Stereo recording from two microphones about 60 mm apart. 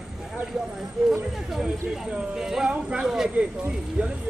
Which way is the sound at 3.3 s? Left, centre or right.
Right.